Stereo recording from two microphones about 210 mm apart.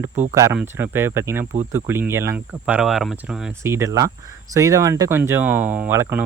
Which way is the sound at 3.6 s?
15° right (ahead or behind).